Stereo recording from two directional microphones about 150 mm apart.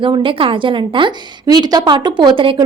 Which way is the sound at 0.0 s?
35° right (ahead or behind).